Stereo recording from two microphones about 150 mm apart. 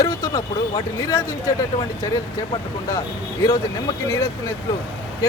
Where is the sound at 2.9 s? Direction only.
20° left (ahead or behind).